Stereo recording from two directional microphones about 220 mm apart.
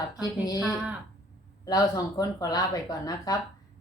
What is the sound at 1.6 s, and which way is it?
Speech, 15° left (ahead or behind).